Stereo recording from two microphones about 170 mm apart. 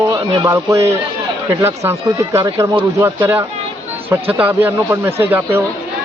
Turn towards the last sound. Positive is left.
turn(degrees=-15)  # may be behind; listen again after turning